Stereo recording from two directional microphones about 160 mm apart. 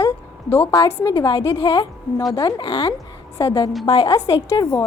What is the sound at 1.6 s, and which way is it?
A woman's voice, 30° left (ahead or behind).